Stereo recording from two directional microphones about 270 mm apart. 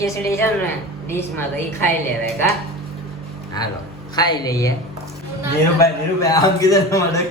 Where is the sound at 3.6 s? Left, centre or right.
Centre.